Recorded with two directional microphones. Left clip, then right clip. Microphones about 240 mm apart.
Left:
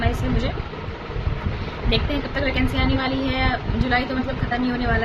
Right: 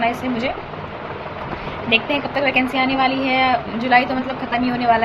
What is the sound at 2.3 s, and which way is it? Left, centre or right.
A woman's voice, centre.